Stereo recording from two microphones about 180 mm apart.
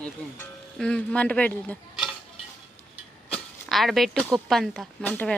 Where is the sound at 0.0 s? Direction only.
5° left (ahead or behind).